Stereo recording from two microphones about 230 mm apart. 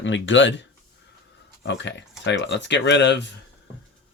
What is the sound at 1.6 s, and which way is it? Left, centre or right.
Speech, left.